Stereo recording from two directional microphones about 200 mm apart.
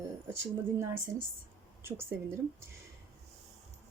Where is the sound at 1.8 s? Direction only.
10° right (ahead or behind).